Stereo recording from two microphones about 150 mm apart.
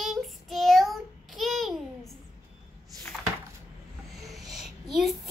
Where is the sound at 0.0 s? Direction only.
Centre (ahead or behind).